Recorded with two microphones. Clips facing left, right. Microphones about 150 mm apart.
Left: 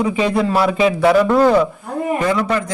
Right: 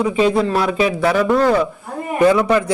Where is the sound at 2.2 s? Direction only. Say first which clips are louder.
Right 7 dB; 20° right (ahead or behind).